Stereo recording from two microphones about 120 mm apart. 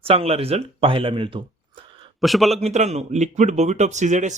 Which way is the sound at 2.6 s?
65° right (ahead or behind).